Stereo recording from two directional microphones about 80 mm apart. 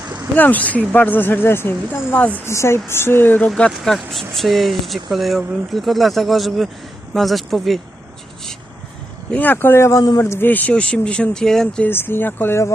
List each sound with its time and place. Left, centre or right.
0.3 s speech: left
3.5 s speech: centre
9.3 s speech: left
11.8 s speech: left